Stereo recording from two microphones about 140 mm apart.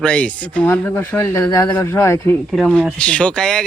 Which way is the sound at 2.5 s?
5° left (ahead or behind).